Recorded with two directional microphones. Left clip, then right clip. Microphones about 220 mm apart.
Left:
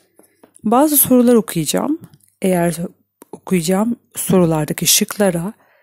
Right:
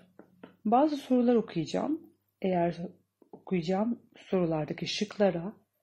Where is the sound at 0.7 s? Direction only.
45° left (ahead or behind).